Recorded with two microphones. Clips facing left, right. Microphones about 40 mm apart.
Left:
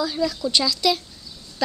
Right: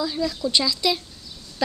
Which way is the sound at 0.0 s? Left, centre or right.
Centre.